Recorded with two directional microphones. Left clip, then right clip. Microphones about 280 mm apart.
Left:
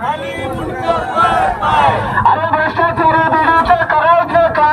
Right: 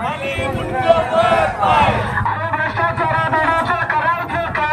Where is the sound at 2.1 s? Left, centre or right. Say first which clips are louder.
Left 7 dB; left.